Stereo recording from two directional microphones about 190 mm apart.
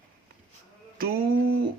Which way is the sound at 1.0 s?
50° right (ahead or behind).